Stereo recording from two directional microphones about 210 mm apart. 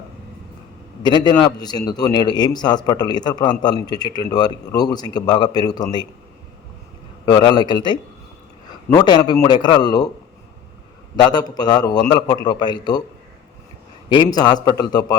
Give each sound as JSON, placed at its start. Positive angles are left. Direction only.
{"t": 1.0, "sound": "a man's voice", "side_deg": 20}
{"t": 7.3, "sound": "a man's voice", "side_deg": 20}
{"t": 11.2, "sound": "a man's voice", "side_deg": 20}
{"t": 14.1, "sound": "a man's voice", "side_deg": 20}